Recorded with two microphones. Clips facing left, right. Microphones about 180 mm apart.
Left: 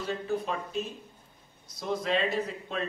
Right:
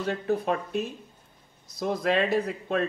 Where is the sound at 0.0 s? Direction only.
60° right (ahead or behind).